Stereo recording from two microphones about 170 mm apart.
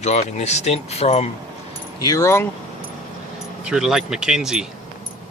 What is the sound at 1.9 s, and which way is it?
Speech, 20° left (ahead or behind).